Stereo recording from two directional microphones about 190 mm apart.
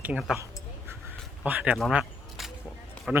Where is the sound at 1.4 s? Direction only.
5° right (ahead or behind).